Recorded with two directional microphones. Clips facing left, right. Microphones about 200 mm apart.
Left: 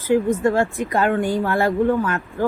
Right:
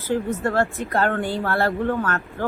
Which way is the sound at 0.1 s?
15° left (ahead or behind).